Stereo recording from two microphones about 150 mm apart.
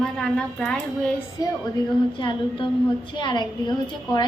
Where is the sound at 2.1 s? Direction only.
35° left (ahead or behind).